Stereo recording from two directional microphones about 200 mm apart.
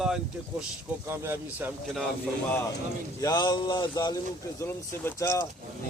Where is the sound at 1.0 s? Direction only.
10° right (ahead or behind).